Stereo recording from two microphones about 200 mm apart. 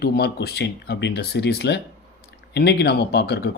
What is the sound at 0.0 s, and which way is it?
Speech, 55° left (ahead or behind).